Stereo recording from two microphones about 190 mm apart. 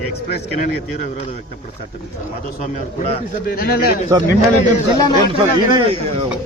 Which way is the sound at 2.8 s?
40° left (ahead or behind).